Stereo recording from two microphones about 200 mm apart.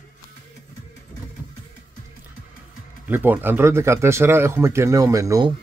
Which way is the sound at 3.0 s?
10° right (ahead or behind).